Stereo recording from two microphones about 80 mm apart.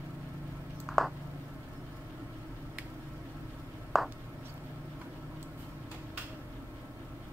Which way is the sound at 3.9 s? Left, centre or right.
Centre.